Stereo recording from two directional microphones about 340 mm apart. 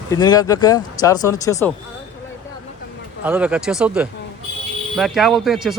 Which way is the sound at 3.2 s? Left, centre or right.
Centre.